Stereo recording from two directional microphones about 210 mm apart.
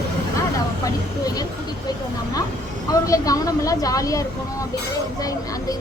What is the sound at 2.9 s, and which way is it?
Speech, 15° left (ahead or behind).